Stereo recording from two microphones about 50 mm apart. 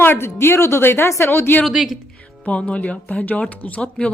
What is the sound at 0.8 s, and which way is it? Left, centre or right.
Speech, left.